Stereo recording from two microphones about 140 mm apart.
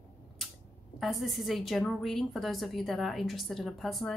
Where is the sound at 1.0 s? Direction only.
Centre (ahead or behind).